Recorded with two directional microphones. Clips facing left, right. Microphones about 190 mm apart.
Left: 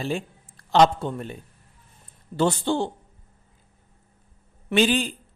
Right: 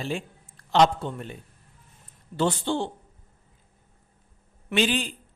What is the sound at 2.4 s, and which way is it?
Speech, 45° left (ahead or behind).